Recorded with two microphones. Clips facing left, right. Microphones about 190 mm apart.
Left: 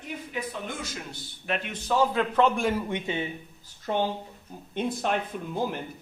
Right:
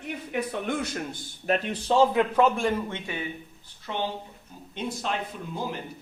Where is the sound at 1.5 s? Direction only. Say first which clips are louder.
Right 4 dB; 30° right (ahead or behind).